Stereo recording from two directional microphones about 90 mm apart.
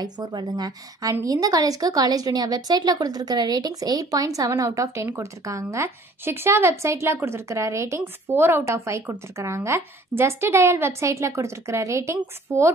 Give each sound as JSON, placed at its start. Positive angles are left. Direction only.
{"t": 0.0, "sound": "a woman's voice", "side_deg": -55}